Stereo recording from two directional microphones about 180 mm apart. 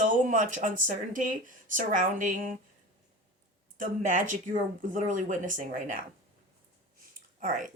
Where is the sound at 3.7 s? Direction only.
45° right (ahead or behind).